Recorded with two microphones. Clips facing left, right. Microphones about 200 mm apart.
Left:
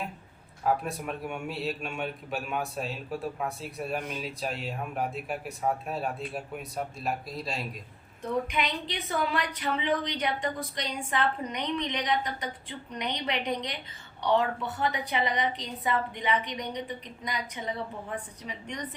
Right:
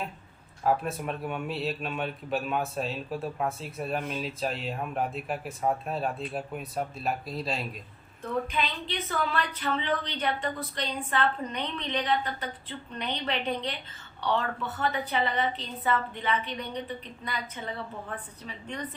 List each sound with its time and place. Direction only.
0.6 s a man's voice: centre (ahead or behind)
8.2 s a woman's voice: 15° left (ahead or behind)